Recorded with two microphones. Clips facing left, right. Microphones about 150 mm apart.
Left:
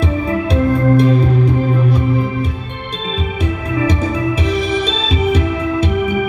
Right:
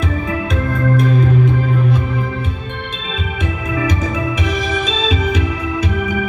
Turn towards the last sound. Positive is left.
turn(degrees=35)  # may be behind; listen again after turning